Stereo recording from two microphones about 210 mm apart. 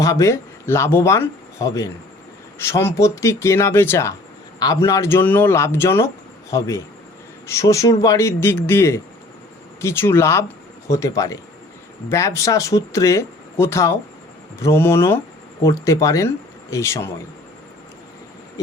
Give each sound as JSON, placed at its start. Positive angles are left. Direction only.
{"t": 0.0, "sound": "speech", "side_deg": 15}